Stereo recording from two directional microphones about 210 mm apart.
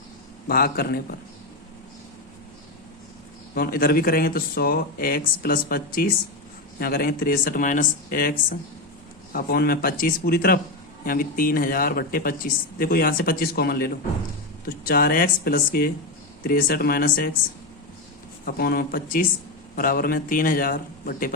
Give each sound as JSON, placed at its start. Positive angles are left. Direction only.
{"t": 0.4, "sound": "speech", "side_deg": 45}
{"t": 3.5, "sound": "speech", "side_deg": 45}
{"t": 18.4, "sound": "speech", "side_deg": 45}